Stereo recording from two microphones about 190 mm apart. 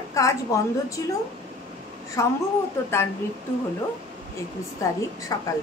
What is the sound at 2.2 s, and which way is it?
Speech, 15° left (ahead or behind).